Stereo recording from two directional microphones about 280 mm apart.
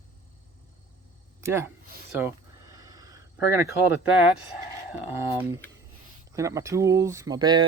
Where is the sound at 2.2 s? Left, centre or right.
Centre.